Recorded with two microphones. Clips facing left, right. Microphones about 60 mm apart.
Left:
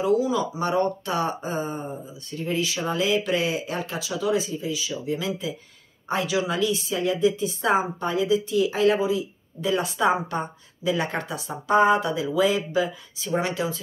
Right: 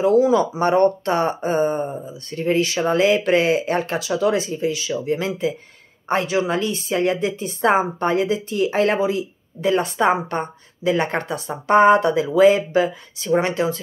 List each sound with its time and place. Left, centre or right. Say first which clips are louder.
0.0 s a woman's voice: right 7 dB; right